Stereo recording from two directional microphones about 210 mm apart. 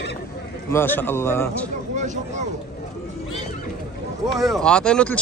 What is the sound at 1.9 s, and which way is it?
Speech, 35° right (ahead or behind).